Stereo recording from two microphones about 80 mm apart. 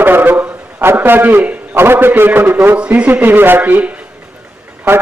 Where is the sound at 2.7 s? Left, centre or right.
Centre.